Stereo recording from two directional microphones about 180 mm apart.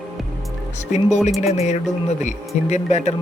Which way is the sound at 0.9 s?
40° left (ahead or behind).